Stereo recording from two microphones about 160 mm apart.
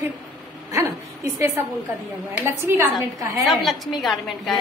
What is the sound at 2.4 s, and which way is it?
A woman's voice, 15° right (ahead or behind).